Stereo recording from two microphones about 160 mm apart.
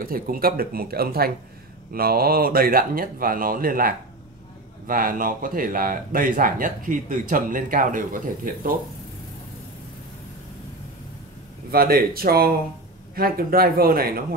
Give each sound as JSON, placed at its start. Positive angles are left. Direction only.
{"t": 0.0, "sound": "speech", "side_deg": -65}
{"t": 11.7, "sound": "speech", "side_deg": -70}